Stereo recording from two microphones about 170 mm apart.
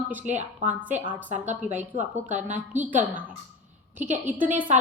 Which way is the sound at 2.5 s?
10° right (ahead or behind).